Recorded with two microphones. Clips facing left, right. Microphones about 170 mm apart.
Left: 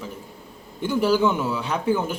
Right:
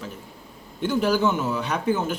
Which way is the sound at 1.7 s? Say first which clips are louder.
Left 2 dB; 10° left (ahead or behind).